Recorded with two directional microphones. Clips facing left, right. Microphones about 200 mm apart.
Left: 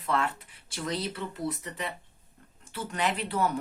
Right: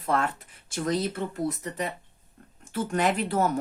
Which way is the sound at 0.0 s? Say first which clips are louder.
Right 3 dB; 45° right (ahead or behind).